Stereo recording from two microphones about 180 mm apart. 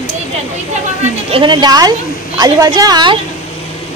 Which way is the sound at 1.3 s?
25° right (ahead or behind).